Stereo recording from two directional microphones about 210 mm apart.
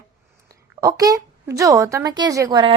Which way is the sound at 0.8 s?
15° right (ahead or behind).